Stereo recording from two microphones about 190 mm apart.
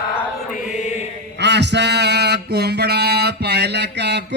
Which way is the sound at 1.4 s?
65° right (ahead or behind).